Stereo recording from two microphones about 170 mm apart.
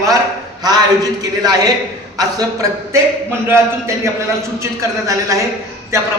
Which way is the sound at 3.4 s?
15° right (ahead or behind).